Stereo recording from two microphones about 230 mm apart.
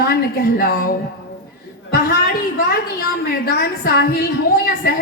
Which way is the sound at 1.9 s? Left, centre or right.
Left.